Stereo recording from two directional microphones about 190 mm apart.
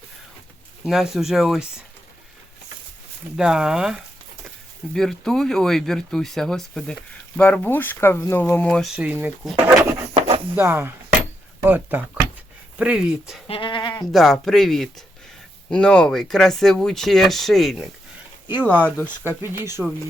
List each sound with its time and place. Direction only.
0.9 s speech: centre (ahead or behind)
3.3 s speech: 5° right (ahead or behind)
9.0 s speech: 10° right (ahead or behind)
13.5 s speech: 25° left (ahead or behind)
14.1 s speech: centre (ahead or behind)
18.4 s speech: 10° right (ahead or behind)